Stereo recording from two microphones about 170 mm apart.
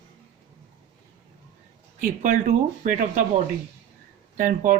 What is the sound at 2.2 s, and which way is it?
Speech, 50° right (ahead or behind).